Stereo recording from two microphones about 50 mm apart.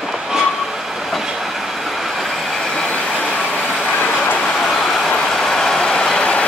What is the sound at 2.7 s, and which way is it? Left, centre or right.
Vehicle, centre.